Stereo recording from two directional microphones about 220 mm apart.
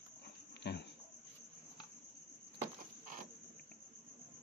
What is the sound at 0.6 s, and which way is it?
Insect, 50° left (ahead or behind).